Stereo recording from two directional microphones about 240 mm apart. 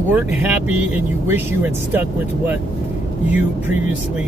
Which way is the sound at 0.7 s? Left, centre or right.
Centre.